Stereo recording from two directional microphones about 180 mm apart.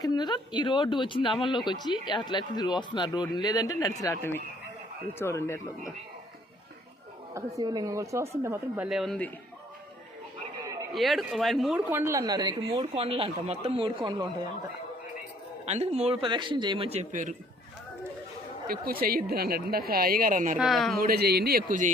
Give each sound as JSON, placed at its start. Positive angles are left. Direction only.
{"t": 0.0, "sound": "speech", "side_deg": 25}
{"t": 7.3, "sound": "speech", "side_deg": -20}
{"t": 10.9, "sound": "speech", "side_deg": 0}
{"t": 15.6, "sound": "speech", "side_deg": -35}
{"t": 18.7, "sound": "a woman's voice", "side_deg": -55}
{"t": 20.6, "sound": "speech", "side_deg": 0}
{"t": 20.9, "sound": "a woman's voice", "side_deg": -55}